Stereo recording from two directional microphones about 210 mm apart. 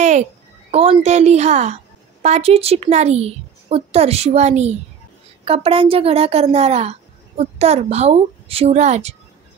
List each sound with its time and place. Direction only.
0.0 s a child's voice: 35° right (ahead or behind)